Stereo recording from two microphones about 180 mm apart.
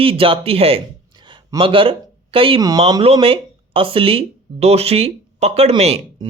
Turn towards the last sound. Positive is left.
turn(degrees=-35)  # may be behind; listen again after turning